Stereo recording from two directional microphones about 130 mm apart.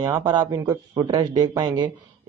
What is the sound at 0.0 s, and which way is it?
Speech, 35° right (ahead or behind).